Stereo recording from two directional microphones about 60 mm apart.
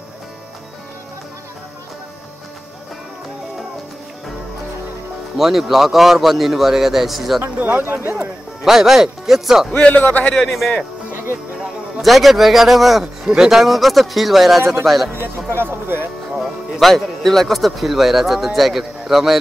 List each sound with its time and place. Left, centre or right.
5.4 s a man's voice: centre
7.4 s speech: right
8.6 s speech: centre
9.7 s a man's voice: left
12.0 s a man's voice: centre
15.1 s speech: right
16.3 s speech: centre